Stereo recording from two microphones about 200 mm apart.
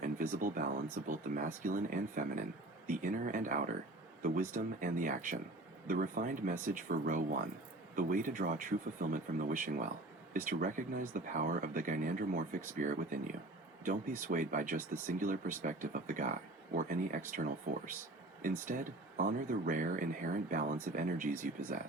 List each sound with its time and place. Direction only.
0.0 s speech: 45° right (ahead or behind)